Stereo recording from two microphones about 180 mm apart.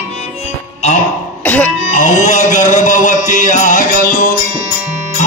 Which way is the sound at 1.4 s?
10° left (ahead or behind).